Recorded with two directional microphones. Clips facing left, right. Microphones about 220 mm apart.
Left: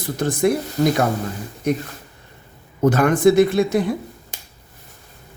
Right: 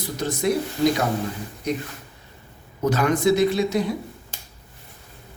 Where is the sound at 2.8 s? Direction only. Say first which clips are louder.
Left 5 dB; 50° left (ahead or behind).